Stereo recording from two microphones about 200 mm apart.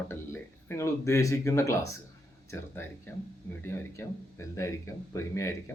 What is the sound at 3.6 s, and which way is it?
Speech, 15° left (ahead or behind).